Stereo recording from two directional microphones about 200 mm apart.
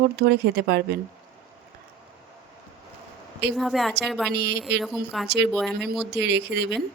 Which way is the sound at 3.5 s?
Centre (ahead or behind).